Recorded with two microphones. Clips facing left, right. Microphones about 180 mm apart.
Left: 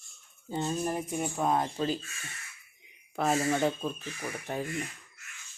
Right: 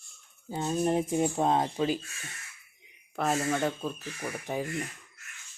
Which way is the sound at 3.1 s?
Centre (ahead or behind).